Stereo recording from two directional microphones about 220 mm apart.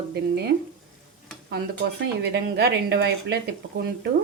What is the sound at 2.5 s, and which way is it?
Speech, 50° right (ahead or behind).